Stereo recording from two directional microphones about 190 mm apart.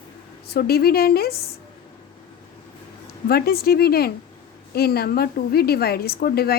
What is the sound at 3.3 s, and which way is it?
A woman's voice, 55° left (ahead or behind).